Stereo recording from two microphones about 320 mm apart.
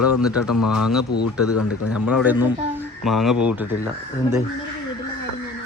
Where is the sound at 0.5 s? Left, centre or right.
Left.